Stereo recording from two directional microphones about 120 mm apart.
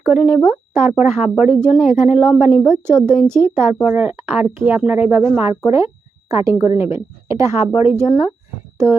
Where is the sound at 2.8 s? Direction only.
20° right (ahead or behind).